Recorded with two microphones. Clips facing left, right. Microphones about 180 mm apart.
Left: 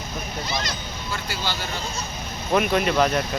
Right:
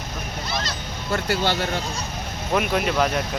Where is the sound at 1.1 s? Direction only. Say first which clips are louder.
Right 8 dB; 60° right (ahead or behind).